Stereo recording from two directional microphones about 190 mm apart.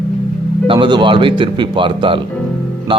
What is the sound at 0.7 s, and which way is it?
Speech, 25° right (ahead or behind).